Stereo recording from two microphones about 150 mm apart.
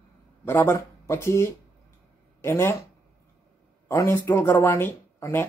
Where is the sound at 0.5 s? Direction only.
15° left (ahead or behind).